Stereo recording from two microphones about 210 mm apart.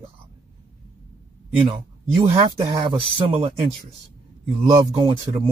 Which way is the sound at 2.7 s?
20° right (ahead or behind).